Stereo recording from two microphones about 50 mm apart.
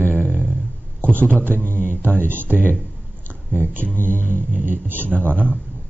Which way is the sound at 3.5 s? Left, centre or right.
Right.